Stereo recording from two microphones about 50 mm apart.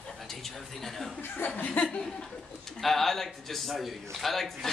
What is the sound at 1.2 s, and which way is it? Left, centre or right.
Speech, left.